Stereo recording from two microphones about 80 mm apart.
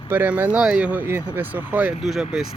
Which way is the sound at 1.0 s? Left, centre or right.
Right.